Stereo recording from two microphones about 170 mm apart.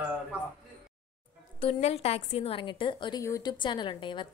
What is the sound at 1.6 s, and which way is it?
A woman's voice, 40° left (ahead or behind).